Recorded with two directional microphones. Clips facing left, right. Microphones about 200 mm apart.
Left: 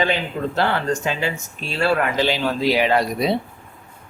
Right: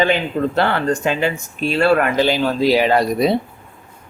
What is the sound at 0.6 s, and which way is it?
Speech, 55° right (ahead or behind).